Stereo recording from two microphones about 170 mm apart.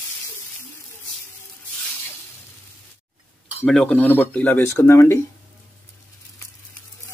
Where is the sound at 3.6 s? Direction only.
5° left (ahead or behind).